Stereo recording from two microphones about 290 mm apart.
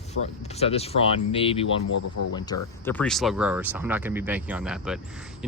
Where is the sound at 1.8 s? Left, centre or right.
Left.